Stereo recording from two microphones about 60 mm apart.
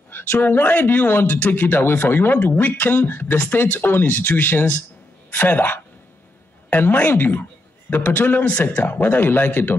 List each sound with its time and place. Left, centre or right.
0.1 s speech: left